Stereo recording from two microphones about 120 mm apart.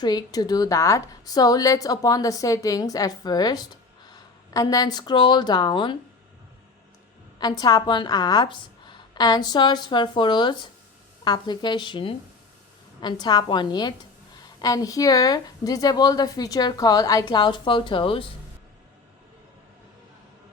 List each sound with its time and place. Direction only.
0.0 s a woman's voice: 30° left (ahead or behind)
7.3 s a woman's voice: 35° left (ahead or behind)